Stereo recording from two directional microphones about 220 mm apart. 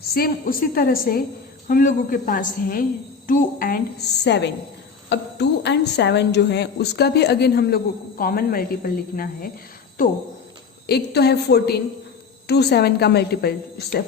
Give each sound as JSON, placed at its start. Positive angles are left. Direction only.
{"t": 0.0, "sound": "a woman's voice", "side_deg": 45}